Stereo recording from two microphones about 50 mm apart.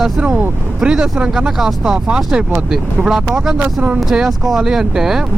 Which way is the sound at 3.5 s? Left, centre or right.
Right.